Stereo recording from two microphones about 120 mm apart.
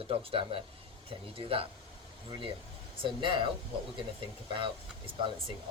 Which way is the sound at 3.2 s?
45° right (ahead or behind).